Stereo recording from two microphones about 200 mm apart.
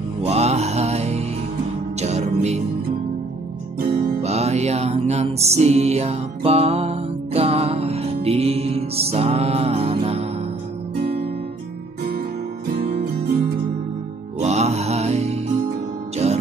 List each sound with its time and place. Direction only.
0.2 s mantra: 30° right (ahead or behind)
2.0 s music: 35° right (ahead or behind)
3.8 s music: 50° right (ahead or behind)
4.2 s music: 30° right (ahead or behind)
12.7 s music: 50° right (ahead or behind)
14.4 s music: 35° right (ahead or behind)